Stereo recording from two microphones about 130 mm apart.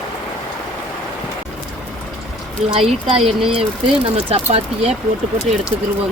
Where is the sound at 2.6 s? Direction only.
50° right (ahead or behind).